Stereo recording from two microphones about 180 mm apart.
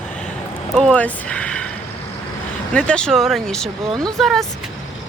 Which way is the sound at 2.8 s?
5° left (ahead or behind).